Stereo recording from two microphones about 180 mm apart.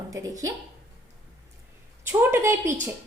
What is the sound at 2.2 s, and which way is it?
Speech, 15° right (ahead or behind).